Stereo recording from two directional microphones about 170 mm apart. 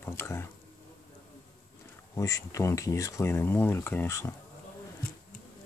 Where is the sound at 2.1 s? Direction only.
20° left (ahead or behind).